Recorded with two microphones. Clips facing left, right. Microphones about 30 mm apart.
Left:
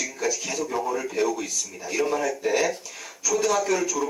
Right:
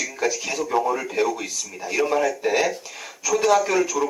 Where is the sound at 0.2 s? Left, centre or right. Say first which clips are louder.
Right 3 dB; centre.